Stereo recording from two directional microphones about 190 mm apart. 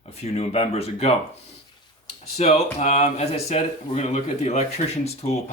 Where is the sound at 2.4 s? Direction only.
35° left (ahead or behind).